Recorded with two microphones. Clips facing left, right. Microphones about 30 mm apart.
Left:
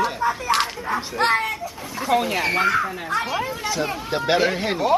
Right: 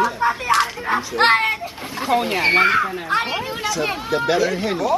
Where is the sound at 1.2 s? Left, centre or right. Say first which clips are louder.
Right 5 dB; right.